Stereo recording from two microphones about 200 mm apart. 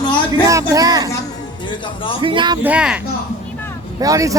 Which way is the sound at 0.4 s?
15° right (ahead or behind).